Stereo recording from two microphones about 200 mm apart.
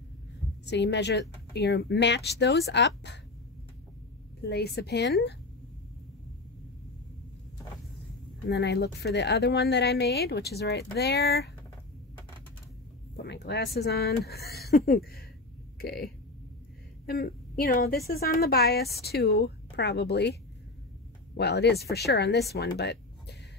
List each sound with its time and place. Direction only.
0.7 s speech: 60° left (ahead or behind)
4.4 s speech: 55° left (ahead or behind)
8.5 s speech: 55° left (ahead or behind)
13.1 s speech: 55° left (ahead or behind)
14.4 s speech: centre (ahead or behind)
14.9 s a woman's voice: 50° left (ahead or behind)
21.4 s speech: 55° left (ahead or behind)
22.8 s a sound: 55° left (ahead or behind)